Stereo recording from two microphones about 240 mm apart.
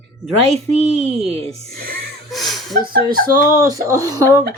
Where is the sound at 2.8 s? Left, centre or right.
Right.